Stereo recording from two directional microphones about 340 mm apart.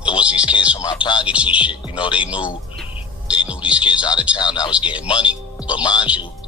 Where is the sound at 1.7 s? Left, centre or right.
Centre.